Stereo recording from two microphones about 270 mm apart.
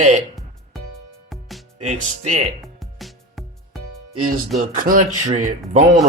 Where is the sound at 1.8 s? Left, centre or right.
Right.